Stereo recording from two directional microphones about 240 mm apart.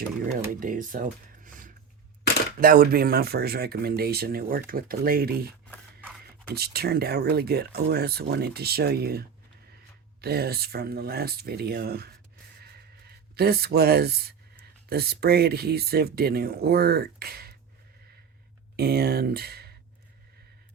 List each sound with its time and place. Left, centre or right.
0.6 s speech: right
12.5 s a sound: right
14.8 s speech: right
18.8 s speech: right